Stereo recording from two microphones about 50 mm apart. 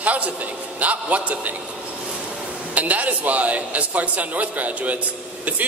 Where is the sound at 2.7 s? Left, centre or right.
Right.